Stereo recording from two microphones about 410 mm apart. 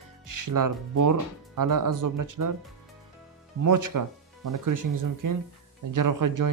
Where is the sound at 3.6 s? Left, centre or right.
Right.